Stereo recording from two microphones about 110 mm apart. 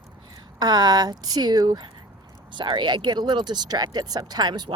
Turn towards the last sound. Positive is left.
turn(degrees=-40)  # may be behind; listen again after turning